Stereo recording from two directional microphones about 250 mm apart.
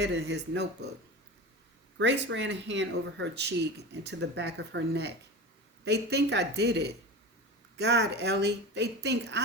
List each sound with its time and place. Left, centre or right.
0.0 s speech: right
2.0 s speech: right